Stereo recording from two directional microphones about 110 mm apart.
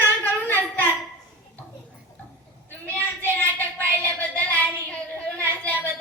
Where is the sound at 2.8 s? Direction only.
15° left (ahead or behind).